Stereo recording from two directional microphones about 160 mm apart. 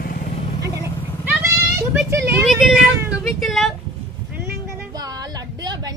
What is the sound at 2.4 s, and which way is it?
Vehicle, centre (ahead or behind).